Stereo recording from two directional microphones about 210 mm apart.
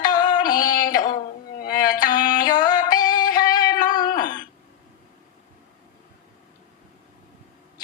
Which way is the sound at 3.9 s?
20° left (ahead or behind).